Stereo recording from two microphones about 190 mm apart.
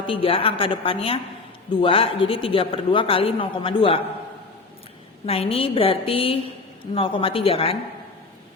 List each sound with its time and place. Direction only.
0.1 s a man's voice: 30° left (ahead or behind)
5.2 s a man's voice: 30° left (ahead or behind)